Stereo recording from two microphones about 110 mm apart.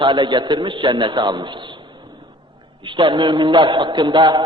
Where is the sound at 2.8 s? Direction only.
50° right (ahead or behind).